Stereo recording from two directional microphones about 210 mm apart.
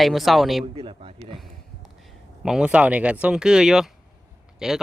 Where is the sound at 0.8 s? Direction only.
25° right (ahead or behind).